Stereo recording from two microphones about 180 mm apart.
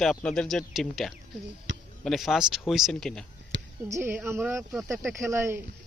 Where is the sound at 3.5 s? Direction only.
85° right.